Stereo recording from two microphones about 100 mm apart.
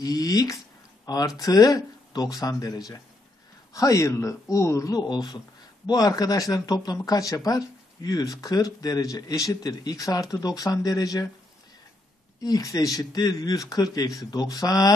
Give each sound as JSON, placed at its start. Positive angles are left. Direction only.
{"t": 0.0, "sound": "speech", "side_deg": 40}
{"t": 12.4, "sound": "speech", "side_deg": 35}